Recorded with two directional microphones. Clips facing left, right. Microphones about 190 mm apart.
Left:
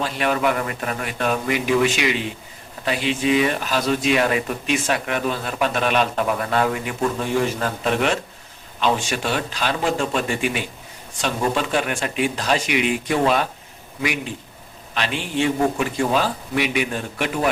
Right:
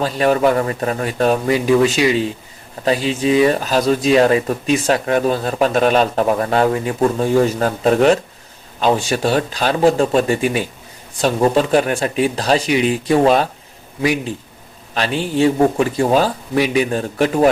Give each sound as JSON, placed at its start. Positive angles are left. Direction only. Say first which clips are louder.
{"t": 0.0, "sound": "speech", "louder": "right 6 dB", "side_deg": -35}
{"t": 14.9, "sound": "speech", "louder": "right 6 dB", "side_deg": -35}